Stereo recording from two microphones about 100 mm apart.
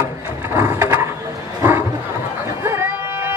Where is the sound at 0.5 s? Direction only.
30° right (ahead or behind).